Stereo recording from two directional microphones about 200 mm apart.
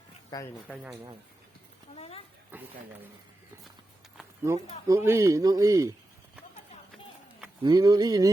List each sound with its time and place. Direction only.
2.0 s speech: 30° left (ahead or behind)
2.5 s speech: 10° right (ahead or behind)
4.4 s speech: 15° right (ahead or behind)
7.6 s speech: 20° right (ahead or behind)